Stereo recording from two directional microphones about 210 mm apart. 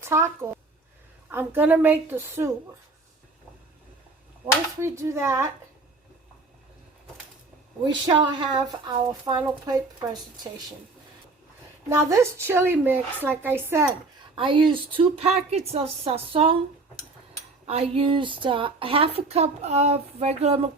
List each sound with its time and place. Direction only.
0.0 s a woman's voice: 10° right (ahead or behind)
4.8 s a woman's voice: 15° right (ahead or behind)
7.9 s speech: 20° right (ahead or behind)
11.9 s a woman's voice: 15° right (ahead or behind)
14.3 s speech: 25° right (ahead or behind)
17.7 s speech: 25° right (ahead or behind)